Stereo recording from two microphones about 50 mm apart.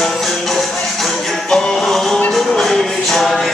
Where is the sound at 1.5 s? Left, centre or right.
Centre.